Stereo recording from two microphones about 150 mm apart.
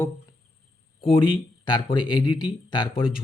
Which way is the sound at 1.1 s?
35° left (ahead or behind).